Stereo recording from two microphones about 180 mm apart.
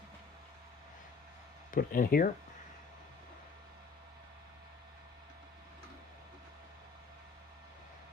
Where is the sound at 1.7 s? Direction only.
50° left (ahead or behind).